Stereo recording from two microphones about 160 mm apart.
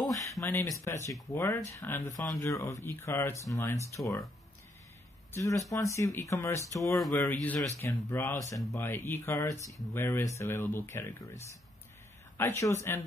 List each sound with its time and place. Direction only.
0.1 s speech: 20° left (ahead or behind)
5.3 s speech: 20° left (ahead or behind)